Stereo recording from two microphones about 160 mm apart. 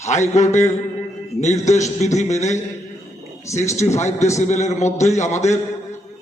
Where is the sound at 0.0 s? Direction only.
45° left (ahead or behind).